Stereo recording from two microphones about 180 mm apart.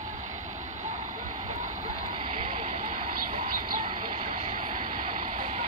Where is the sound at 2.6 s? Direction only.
45° right (ahead or behind).